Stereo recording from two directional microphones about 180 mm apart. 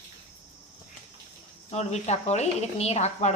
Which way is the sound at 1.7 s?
40° left (ahead or behind).